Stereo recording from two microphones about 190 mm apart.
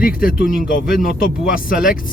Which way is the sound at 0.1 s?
50° left (ahead or behind).